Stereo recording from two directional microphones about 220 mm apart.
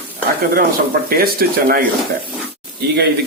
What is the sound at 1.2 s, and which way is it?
Speech, 40° right (ahead or behind).